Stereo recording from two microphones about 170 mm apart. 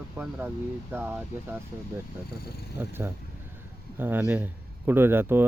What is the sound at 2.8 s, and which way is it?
Speech, 15° right (ahead or behind).